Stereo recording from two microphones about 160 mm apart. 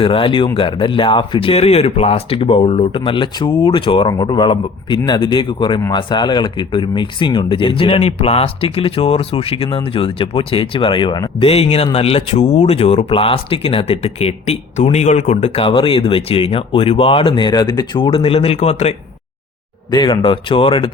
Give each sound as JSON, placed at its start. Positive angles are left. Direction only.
{"t": 0.0, "sound": "speech", "side_deg": 35}
{"t": 19.9, "sound": "speech", "side_deg": 30}